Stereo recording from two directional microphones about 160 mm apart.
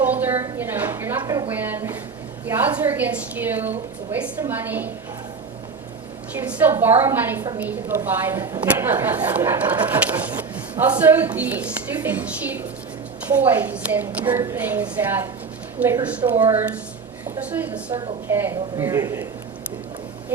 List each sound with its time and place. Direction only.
0.0 s a woman's voice: 10° right (ahead or behind)
1.5 s a woman's voice: 10° right (ahead or behind)
6.5 s a woman's voice: 10° right (ahead or behind)
17.5 s a woman's voice: 10° right (ahead or behind)